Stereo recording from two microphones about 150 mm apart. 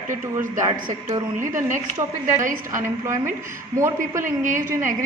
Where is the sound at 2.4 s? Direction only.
60° right (ahead or behind).